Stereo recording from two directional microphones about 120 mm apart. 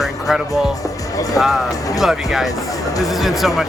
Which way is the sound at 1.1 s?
30° left (ahead or behind).